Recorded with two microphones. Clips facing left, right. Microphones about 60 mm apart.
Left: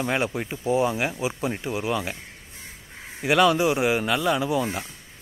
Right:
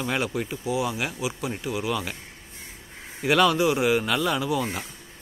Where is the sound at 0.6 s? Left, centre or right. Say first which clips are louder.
Left 6 dB; left.